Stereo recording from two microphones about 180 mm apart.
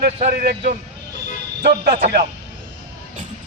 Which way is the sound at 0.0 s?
55° right (ahead or behind).